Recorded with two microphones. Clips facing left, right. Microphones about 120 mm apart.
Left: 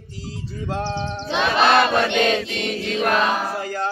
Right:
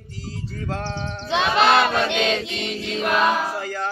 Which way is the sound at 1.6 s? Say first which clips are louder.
Left 1 dB; 50° left (ahead or behind).